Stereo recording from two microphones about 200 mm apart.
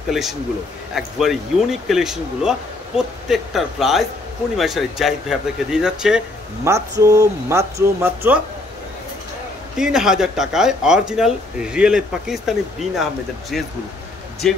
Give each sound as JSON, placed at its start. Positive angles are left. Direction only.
{"t": 0.1, "sound": "speech", "side_deg": 0}
{"t": 6.7, "sound": "speech", "side_deg": -15}
{"t": 9.8, "sound": "speech", "side_deg": -5}